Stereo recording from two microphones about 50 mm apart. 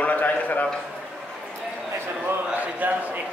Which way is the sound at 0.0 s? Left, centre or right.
Left.